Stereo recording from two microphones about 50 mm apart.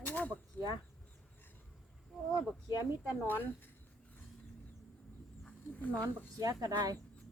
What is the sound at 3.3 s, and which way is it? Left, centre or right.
Speech, left.